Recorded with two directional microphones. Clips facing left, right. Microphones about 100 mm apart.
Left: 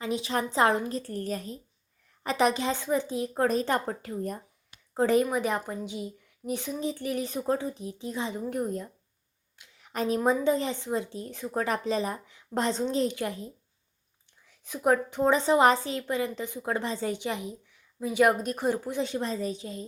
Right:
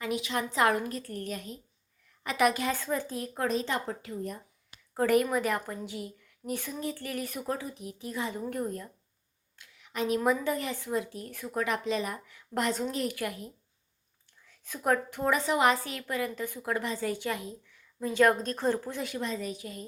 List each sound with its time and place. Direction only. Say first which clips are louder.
0.0 s a woman's voice: left 2 dB; 30° left (ahead or behind)
3.3 s speech: left 4 dB; 45° left (ahead or behind)
4.9 s a woman's voice: left 1 dB; 25° left (ahead or behind)
9.7 s a sound: left 1 dB; 40° left (ahead or behind)
10.2 s a woman's voice: left 4 dB; 25° left (ahead or behind)
11.5 s a woman's voice: left 2 dB; 35° left (ahead or behind); by 19.0 s 15° left (ahead or behind)
19.0 s a woman's voice: left 3 dB; 30° left (ahead or behind)